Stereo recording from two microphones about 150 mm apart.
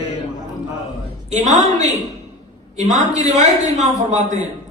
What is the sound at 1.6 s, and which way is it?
Speech, 25° left (ahead or behind).